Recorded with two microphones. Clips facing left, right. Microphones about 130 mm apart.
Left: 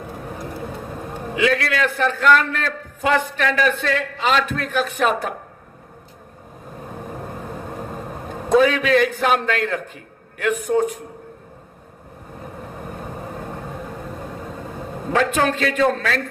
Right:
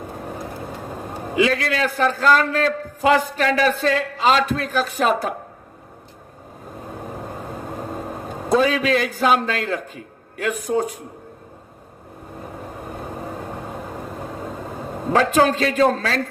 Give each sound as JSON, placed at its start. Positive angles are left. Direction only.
{"t": 1.4, "sound": "a man's voice", "side_deg": -35}
{"t": 8.5, "sound": "a man's voice", "side_deg": -35}
{"t": 15.1, "sound": "a man's voice", "side_deg": -35}